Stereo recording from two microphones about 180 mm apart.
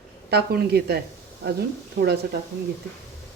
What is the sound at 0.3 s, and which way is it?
Speech, 65° right (ahead or behind).